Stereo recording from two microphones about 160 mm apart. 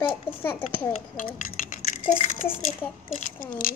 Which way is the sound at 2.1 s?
50° left (ahead or behind).